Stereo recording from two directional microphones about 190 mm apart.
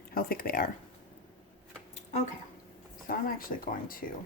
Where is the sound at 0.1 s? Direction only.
50° left (ahead or behind).